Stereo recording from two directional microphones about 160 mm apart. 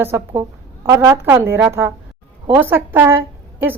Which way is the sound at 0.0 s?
15° right (ahead or behind).